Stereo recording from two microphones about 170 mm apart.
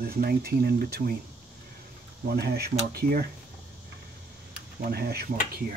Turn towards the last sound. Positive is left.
turn(degrees=-65)  # may be behind; listen again after turning